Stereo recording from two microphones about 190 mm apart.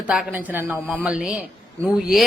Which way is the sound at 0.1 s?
5° right (ahead or behind).